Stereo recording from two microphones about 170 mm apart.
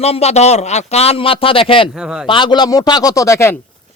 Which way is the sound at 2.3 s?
25° left (ahead or behind).